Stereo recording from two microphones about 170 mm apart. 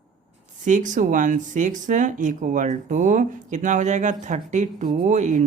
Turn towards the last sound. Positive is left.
turn(degrees=-45)  # may be behind; listen again after turning